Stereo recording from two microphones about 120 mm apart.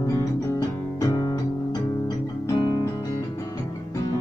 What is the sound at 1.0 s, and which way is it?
Music, 30° left (ahead or behind).